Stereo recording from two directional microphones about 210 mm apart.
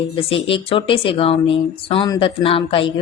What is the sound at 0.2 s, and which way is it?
A woman's voice, 25° left (ahead or behind).